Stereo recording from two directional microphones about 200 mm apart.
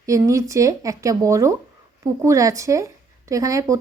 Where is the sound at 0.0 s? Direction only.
15° right (ahead or behind).